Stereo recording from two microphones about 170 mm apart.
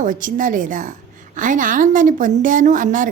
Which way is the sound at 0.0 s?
50° right (ahead or behind).